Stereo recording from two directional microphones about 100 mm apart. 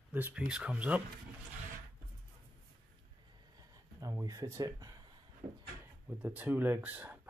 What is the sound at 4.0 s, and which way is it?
Speech, 35° right (ahead or behind).